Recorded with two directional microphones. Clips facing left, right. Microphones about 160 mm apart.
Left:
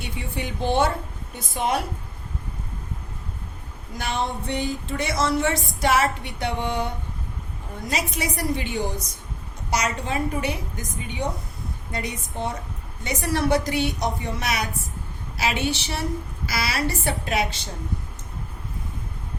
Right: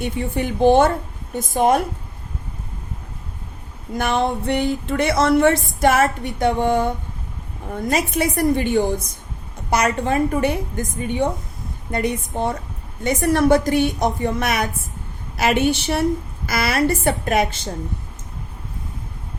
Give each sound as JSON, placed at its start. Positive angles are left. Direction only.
{"t": 0.0, "sound": "a woman's voice", "side_deg": -50}
{"t": 3.9, "sound": "a woman's voice", "side_deg": -55}